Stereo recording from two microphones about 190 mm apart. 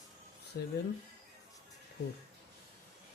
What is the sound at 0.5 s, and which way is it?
Speech, 55° left (ahead or behind).